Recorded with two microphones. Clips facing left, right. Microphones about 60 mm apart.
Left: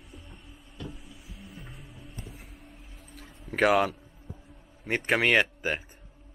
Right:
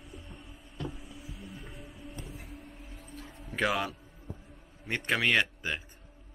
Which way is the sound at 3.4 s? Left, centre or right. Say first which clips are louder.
Left 7 dB; left.